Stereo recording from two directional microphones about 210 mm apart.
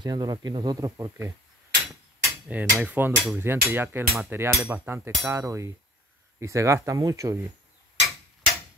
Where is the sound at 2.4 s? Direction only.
5° right (ahead or behind).